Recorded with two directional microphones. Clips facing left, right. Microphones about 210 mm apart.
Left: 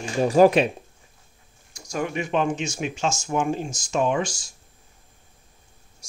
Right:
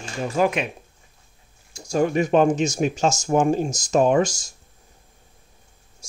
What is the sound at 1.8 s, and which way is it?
Speech, 30° right (ahead or behind).